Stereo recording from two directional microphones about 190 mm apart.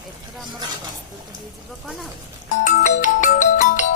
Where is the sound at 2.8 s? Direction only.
40° left (ahead or behind).